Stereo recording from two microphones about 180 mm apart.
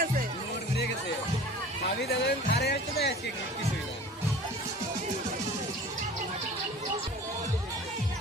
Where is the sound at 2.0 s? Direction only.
65° left (ahead or behind).